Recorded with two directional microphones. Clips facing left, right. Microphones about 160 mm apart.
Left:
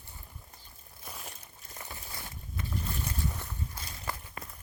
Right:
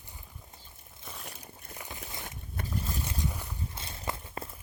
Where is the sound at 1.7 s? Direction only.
15° right (ahead or behind).